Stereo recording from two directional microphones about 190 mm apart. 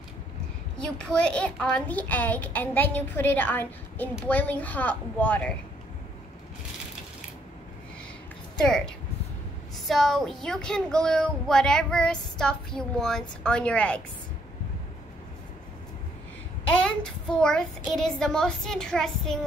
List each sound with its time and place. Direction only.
0.7 s a woman's voice: 5° left (ahead or behind)
8.5 s a woman's voice: 5° left (ahead or behind)
9.8 s speech: centre (ahead or behind)
16.6 s a child's voice: 5° left (ahead or behind)